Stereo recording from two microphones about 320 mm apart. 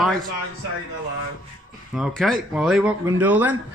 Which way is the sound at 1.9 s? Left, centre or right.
Centre.